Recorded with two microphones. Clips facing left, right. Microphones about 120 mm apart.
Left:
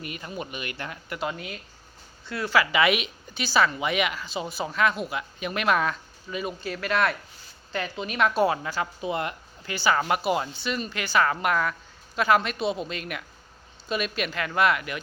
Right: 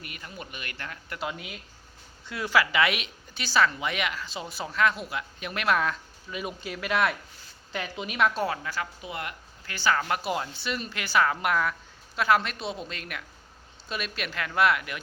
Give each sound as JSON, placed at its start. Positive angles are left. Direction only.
{"t": 0.0, "sound": "speech", "side_deg": 25}
{"t": 1.2, "sound": "speech", "side_deg": -5}
{"t": 2.7, "sound": "speech", "side_deg": 5}
{"t": 6.4, "sound": "speech", "side_deg": -15}
{"t": 8.3, "sound": "speech", "side_deg": 10}
{"t": 8.6, "sound": "speech", "side_deg": 25}
{"t": 9.7, "sound": "speech", "side_deg": 15}